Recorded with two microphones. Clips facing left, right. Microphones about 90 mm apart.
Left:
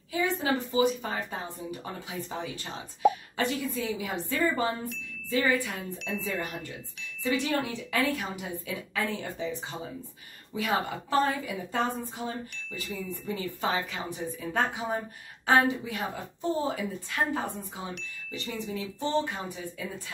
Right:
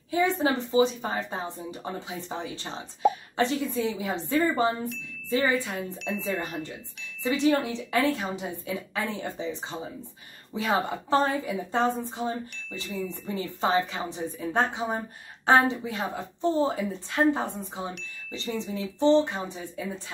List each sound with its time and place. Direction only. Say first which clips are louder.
0.1 s a woman's voice: right 4 dB; 30° right (ahead or behind)
7.2 s a woman's voice: right 5 dB; 25° right (ahead or behind)
18.7 s a woman's voice: right 9 dB; 25° right (ahead or behind)